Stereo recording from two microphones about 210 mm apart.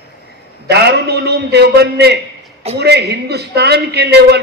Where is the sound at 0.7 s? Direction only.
50° right (ahead or behind).